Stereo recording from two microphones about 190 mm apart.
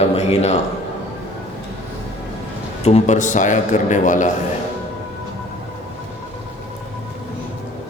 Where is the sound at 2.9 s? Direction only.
35° left (ahead or behind).